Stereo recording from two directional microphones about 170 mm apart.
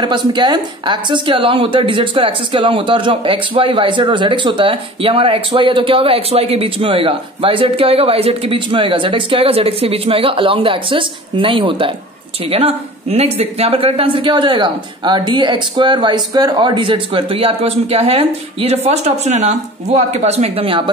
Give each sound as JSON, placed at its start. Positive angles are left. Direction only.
{"t": 0.3, "sound": "a woman's voice", "side_deg": -25}